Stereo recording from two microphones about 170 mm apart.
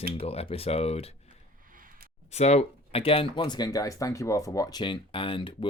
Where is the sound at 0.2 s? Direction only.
35° left (ahead or behind).